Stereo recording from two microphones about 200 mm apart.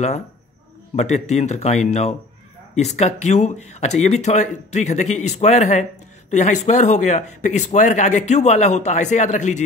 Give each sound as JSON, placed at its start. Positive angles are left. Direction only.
{"t": 0.9, "sound": "speech", "side_deg": 35}